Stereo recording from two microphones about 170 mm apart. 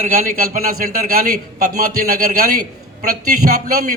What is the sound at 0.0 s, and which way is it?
A man's voice, 55° right (ahead or behind).